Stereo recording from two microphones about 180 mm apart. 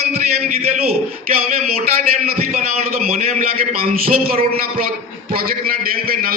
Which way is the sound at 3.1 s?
40° right (ahead or behind).